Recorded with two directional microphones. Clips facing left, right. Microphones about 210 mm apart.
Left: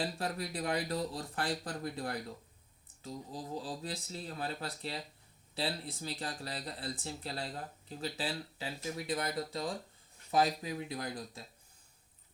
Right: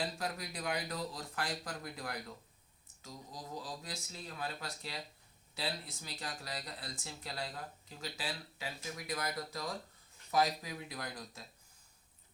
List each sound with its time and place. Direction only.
0.0 s speech: 30° left (ahead or behind)